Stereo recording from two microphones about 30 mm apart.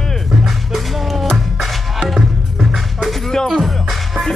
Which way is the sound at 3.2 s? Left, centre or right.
Centre.